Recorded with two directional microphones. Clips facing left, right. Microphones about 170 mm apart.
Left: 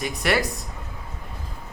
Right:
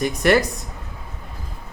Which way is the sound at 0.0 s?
50° right (ahead or behind).